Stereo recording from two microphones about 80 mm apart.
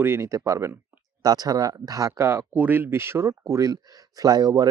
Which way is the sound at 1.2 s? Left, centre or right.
Right.